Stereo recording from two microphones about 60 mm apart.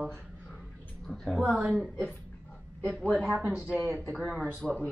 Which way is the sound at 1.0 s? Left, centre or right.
Centre.